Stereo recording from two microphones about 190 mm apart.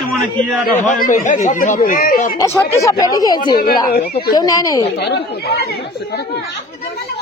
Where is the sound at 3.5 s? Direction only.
55° left (ahead or behind).